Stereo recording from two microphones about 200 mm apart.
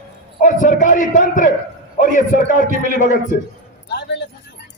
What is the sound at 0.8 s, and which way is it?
A man's voice, 40° left (ahead or behind).